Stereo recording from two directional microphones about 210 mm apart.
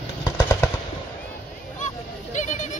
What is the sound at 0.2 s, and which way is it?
Machine gun, 15° left (ahead or behind).